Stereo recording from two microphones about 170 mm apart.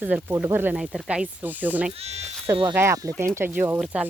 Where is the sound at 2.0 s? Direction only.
40° right (ahead or behind).